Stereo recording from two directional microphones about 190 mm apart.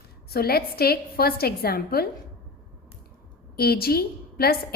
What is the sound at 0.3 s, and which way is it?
A woman's voice, 55° left (ahead or behind).